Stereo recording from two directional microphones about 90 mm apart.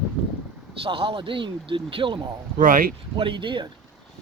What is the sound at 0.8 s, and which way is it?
Speech, 90° right.